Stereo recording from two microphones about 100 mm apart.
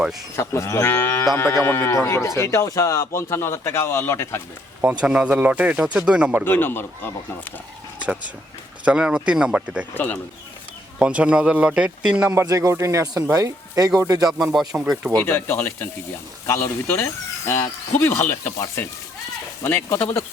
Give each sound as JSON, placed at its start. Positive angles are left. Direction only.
{"t": 0.3, "sound": "a man's voice", "side_deg": 30}
{"t": 4.8, "sound": "speech", "side_deg": -15}
{"t": 6.4, "sound": "a man's voice", "side_deg": 20}
{"t": 8.8, "sound": "speech", "side_deg": -10}
{"t": 9.9, "sound": "speech", "side_deg": 20}
{"t": 11.0, "sound": "speech", "side_deg": -10}
{"t": 12.3, "sound": "speech", "side_deg": -35}
{"t": 14.3, "sound": "speech", "side_deg": -5}
{"t": 15.1, "sound": "a man's voice", "side_deg": 20}
{"t": 19.6, "sound": "a man's voice", "side_deg": 25}